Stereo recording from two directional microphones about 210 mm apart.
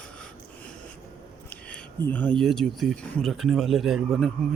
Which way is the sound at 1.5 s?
5° left (ahead or behind).